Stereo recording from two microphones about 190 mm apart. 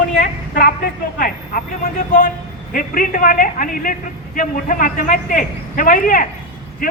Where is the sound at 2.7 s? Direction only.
45° left (ahead or behind).